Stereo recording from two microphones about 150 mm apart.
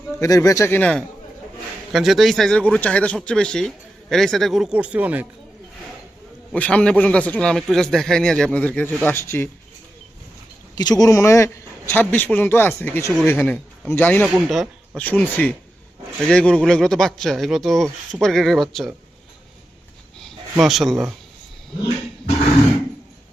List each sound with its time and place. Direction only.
0.2 s speech: 20° left (ahead or behind); by 5.2 s 10° right (ahead or behind)
6.5 s a man's voice: 10° left (ahead or behind)
10.8 s a man's voice: 25° left (ahead or behind)
14.3 s speech: 5° right (ahead or behind)
14.9 s a man's voice: 10° left (ahead or behind)
20.1 s speech: centre (ahead or behind)